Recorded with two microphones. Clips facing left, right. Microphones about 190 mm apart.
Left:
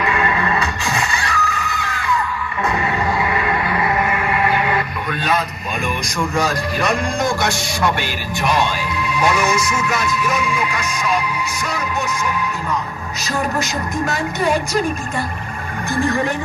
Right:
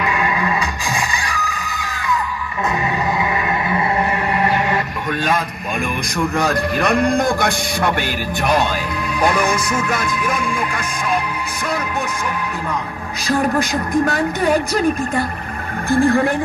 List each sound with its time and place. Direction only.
0.1 s music: 15° right (ahead or behind)
3.2 s music: 20° right (ahead or behind)
4.1 s music: 40° right (ahead or behind)
6.1 s a man's voice: 60° right (ahead or behind)
13.6 s a man's voice: 55° right (ahead or behind)
15.9 s a man's voice: 55° right (ahead or behind)